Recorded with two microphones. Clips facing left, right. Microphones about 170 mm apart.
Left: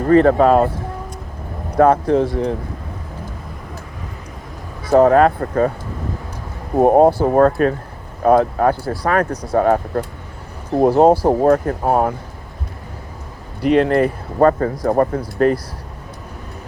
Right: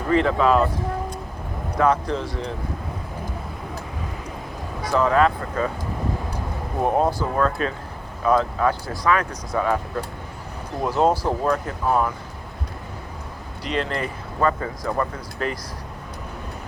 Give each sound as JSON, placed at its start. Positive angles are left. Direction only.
{"t": 0.1, "sound": "speech", "side_deg": 50}
{"t": 1.8, "sound": "speech", "side_deg": 55}
{"t": 4.9, "sound": "speech", "side_deg": 50}
{"t": 6.8, "sound": "speech", "side_deg": 55}
{"t": 10.8, "sound": "speech", "side_deg": 55}
{"t": 13.6, "sound": "speech", "side_deg": 55}